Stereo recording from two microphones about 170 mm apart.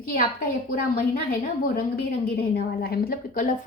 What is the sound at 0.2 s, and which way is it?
A woman's voice, 60° left (ahead or behind).